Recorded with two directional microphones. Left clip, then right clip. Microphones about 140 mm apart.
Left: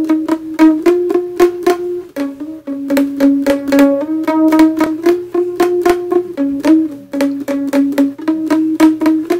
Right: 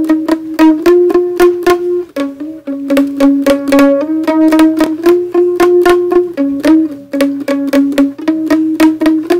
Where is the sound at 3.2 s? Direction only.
10° right (ahead or behind).